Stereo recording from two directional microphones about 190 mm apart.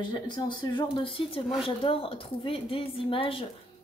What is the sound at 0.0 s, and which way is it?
Speech, 25° left (ahead or behind).